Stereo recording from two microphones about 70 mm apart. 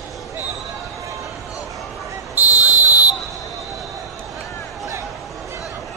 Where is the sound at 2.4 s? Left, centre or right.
Right.